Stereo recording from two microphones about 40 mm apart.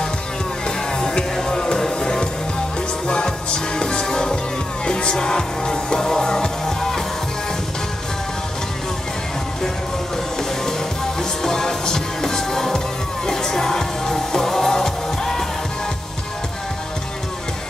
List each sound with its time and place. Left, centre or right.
0.7 s music: centre
11.1 s music: centre